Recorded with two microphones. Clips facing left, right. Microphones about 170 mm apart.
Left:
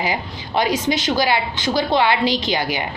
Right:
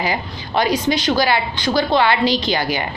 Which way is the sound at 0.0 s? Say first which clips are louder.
Right 1 dB; 15° left (ahead or behind).